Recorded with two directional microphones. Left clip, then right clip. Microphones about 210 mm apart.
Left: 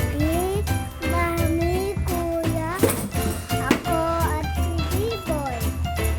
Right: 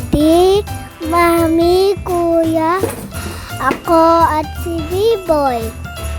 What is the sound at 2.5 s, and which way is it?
Music, 40° right (ahead or behind).